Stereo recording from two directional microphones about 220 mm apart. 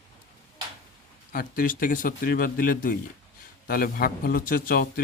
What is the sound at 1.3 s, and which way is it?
A man's voice, 40° left (ahead or behind).